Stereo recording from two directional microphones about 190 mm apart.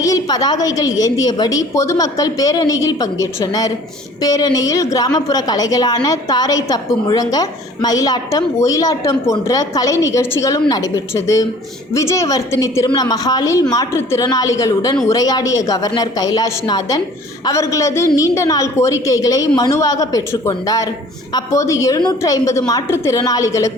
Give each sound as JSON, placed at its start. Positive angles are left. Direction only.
{"t": 0.0, "sound": "a woman's voice", "side_deg": 20}